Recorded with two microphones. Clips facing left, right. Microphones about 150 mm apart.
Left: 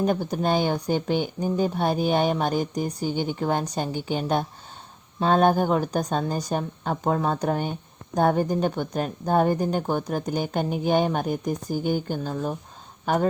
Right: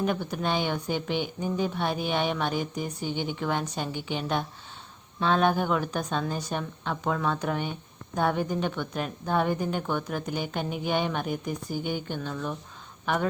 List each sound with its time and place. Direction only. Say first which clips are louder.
0.0 s a woman's voice: left 4 dB; 40° left (ahead or behind)
12.3 s speech: left 5 dB; 30° left (ahead or behind)
13.1 s a woman's voice: left 4 dB; 40° left (ahead or behind)